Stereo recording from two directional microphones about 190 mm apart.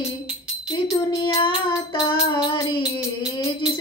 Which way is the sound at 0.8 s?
20° left (ahead or behind).